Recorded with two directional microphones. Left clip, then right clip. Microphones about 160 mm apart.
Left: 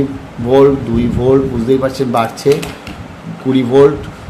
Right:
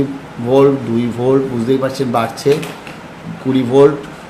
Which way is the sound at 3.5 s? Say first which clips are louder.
Left 1 dB; 10° left (ahead or behind).